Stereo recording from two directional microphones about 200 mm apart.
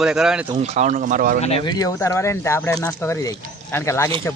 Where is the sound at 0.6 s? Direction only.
35° right (ahead or behind).